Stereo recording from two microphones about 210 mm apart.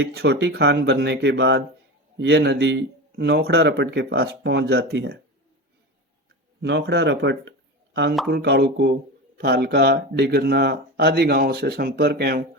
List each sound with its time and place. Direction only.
0.0 s speech: 50° right (ahead or behind)
6.6 s speech: 55° right (ahead or behind)